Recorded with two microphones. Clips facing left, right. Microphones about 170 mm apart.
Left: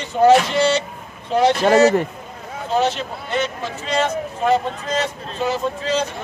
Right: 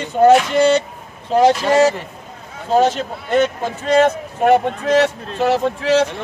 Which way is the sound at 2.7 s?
45° right (ahead or behind).